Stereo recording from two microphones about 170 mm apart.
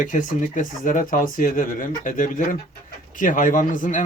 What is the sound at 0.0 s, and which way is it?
Speech, 50° left (ahead or behind).